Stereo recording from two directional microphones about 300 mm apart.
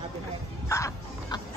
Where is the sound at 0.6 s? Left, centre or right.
Centre.